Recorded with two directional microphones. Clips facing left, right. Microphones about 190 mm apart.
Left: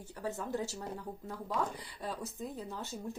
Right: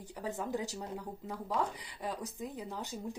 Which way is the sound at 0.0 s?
15° right (ahead or behind).